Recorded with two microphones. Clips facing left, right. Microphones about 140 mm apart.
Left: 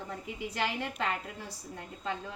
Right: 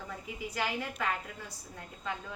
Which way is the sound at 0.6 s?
25° left (ahead or behind).